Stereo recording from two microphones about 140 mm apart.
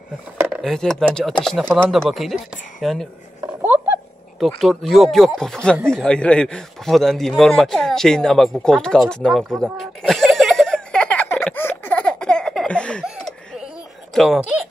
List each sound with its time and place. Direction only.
0.5 s speech: 5° left (ahead or behind)
4.4 s a man's voice: centre (ahead or behind)
11.4 s a sound: 15° left (ahead or behind)
14.1 s speech: centre (ahead or behind)